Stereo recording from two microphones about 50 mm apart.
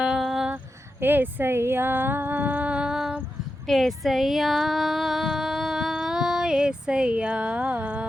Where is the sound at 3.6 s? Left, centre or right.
Centre; by 8.1 s right.